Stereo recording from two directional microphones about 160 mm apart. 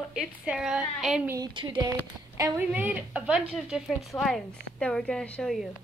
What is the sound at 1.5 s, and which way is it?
Speech, 30° right (ahead or behind).